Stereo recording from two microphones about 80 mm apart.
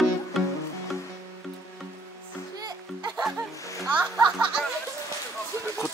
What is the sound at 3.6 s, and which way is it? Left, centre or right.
Music, left.